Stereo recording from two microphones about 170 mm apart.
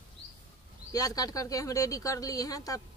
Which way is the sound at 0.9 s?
20° left (ahead or behind).